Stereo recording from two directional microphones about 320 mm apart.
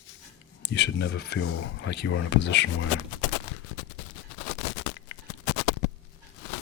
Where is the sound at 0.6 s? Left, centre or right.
Left.